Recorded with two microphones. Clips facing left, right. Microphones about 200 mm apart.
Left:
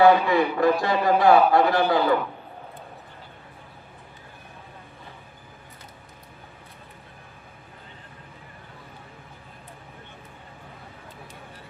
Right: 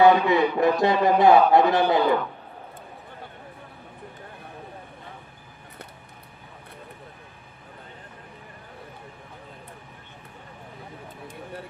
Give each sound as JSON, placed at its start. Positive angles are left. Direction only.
{"t": 0.0, "sound": "a man's voice", "side_deg": -20}